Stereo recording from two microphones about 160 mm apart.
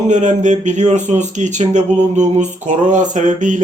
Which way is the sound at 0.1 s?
50° right (ahead or behind).